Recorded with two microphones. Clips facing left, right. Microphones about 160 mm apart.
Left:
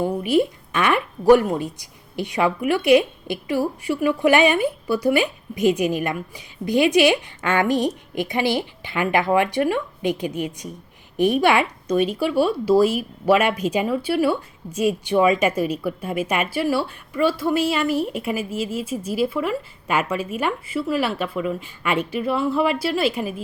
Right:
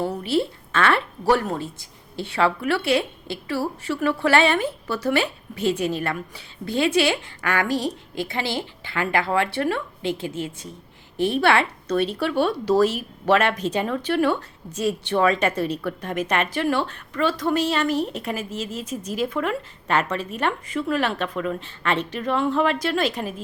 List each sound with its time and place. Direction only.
0.0 s speech: 15° left (ahead or behind)